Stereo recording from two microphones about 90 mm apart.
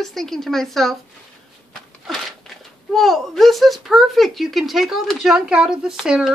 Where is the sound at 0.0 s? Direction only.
5° left (ahead or behind).